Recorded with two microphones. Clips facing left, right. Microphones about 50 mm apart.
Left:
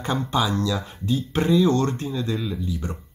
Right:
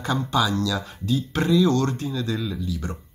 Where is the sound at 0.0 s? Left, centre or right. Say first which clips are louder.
Right 1 dB; left.